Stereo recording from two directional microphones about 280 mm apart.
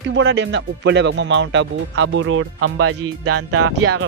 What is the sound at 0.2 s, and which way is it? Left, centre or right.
Speech, right.